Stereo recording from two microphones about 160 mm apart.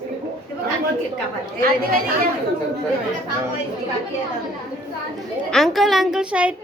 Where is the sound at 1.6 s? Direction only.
65° right (ahead or behind).